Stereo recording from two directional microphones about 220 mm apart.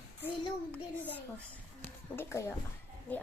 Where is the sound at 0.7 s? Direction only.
5° left (ahead or behind).